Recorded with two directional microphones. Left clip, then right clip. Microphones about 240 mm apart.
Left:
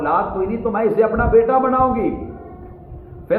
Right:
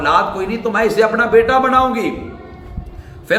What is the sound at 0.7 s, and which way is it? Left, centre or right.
A man's voice, centre.